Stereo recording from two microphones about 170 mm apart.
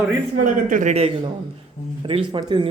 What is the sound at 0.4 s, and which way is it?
A man's voice, 50° right (ahead or behind).